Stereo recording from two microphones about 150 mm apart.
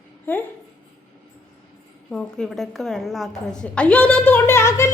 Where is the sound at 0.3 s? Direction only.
15° left (ahead or behind).